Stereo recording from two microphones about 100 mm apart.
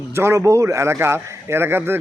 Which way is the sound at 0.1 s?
25° right (ahead or behind).